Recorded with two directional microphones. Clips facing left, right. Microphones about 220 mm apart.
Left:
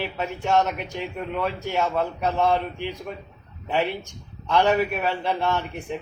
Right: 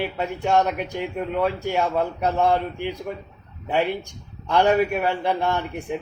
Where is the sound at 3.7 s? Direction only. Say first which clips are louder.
Right 2 dB; 15° right (ahead or behind).